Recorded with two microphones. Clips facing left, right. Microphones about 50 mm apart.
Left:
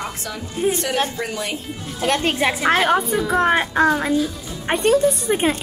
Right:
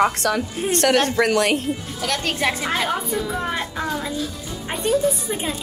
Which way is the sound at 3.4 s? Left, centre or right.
Left.